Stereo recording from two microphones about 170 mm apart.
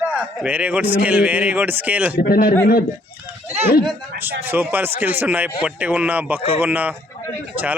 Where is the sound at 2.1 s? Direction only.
65° left (ahead or behind).